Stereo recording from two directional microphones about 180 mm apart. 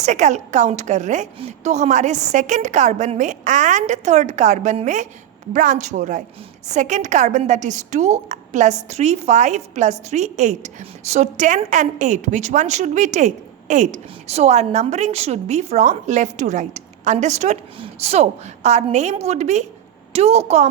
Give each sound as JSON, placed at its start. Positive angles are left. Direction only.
{"t": 0.0, "sound": "a woman's voice", "side_deg": -40}